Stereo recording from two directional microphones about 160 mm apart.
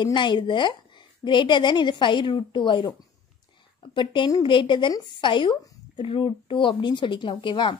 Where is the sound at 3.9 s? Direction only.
30° left (ahead or behind).